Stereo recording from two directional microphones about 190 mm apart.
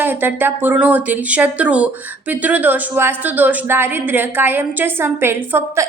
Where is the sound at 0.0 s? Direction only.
10° right (ahead or behind).